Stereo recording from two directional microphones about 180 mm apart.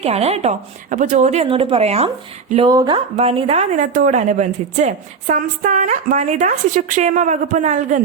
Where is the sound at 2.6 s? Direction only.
25° right (ahead or behind).